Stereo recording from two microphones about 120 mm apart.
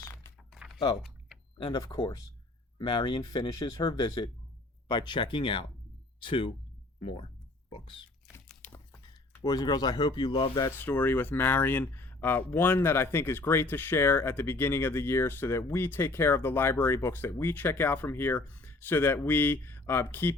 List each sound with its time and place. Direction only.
0.5 s typing: centre (ahead or behind)
1.5 s speech: 40° left (ahead or behind)
8.6 s a sound: 15° left (ahead or behind)
9.0 s speech: 30° left (ahead or behind)
10.7 s speech: 15° left (ahead or behind)